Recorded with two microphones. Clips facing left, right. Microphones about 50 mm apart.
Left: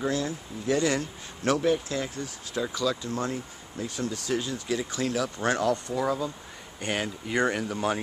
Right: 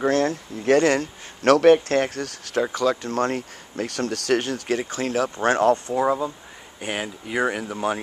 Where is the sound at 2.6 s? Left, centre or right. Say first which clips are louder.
Right 5 dB; right.